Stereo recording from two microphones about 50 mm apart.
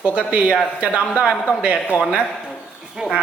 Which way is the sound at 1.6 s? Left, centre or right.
Right.